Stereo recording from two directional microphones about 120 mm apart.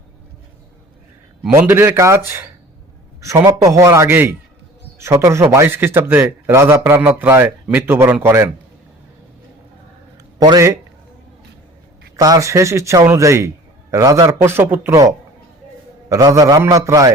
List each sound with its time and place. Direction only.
1.5 s a man's voice: 20° right (ahead or behind)
10.4 s a man's voice: 30° right (ahead or behind)
12.1 s a man's voice: 30° right (ahead or behind)
16.0 s a man's voice: 30° right (ahead or behind)